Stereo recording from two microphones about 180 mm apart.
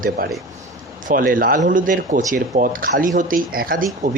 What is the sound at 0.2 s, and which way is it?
Speech, 55° right (ahead or behind).